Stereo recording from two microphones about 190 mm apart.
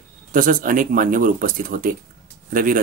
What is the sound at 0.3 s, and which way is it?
Speech, 45° right (ahead or behind).